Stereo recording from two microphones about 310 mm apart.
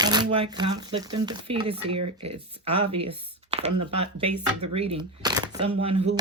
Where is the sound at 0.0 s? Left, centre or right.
Centre.